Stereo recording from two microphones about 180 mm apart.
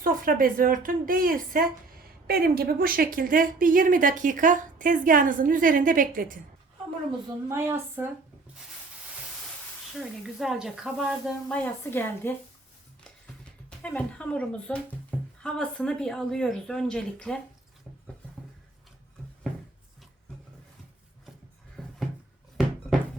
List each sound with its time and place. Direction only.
0.0 s speech: 50° right (ahead or behind)
7.4 s a woman's voice: 15° right (ahead or behind)
10.3 s speech: centre (ahead or behind)
13.1 s music: 5° left (ahead or behind)
15.4 s speech: 5° left (ahead or behind)